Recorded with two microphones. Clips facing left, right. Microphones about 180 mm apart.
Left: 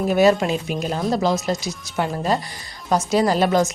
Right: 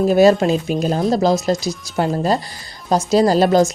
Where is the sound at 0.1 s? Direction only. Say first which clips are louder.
Right 3 dB; 35° right (ahead or behind).